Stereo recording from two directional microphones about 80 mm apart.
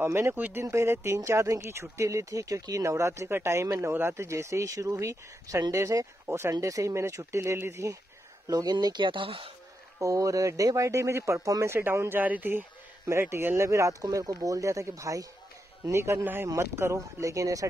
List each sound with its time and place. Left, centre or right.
0.0 s speech: right
8.5 s speech: right
9.9 s speech: right